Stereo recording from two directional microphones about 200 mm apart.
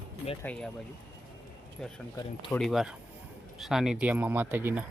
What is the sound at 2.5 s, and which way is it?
Speech, centre (ahead or behind).